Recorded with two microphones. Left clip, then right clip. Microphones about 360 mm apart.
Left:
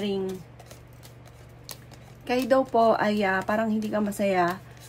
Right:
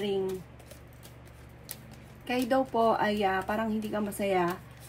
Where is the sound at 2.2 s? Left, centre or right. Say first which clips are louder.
Left 5 dB; left.